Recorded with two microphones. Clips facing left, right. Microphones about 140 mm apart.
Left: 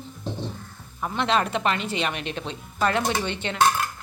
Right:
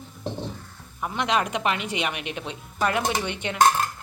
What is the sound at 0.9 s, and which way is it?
Speech, 10° right (ahead or behind).